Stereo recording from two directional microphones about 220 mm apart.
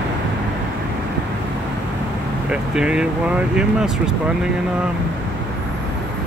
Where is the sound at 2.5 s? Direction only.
5° right (ahead or behind).